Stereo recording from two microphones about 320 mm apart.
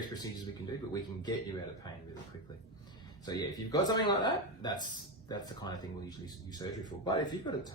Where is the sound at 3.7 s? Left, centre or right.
Centre.